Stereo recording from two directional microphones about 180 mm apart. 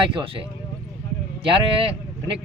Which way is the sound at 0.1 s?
30° right (ahead or behind).